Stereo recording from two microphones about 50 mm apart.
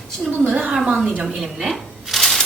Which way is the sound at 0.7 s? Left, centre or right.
Centre.